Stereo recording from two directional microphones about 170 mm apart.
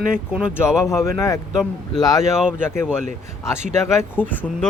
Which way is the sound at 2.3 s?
5° right (ahead or behind).